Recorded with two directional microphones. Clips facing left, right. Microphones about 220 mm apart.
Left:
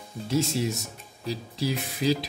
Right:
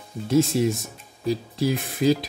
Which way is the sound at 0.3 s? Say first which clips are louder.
Right 6 dB; 50° right (ahead or behind).